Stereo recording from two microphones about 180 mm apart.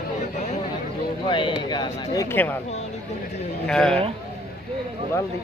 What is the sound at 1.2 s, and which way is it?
Speech, 25° left (ahead or behind).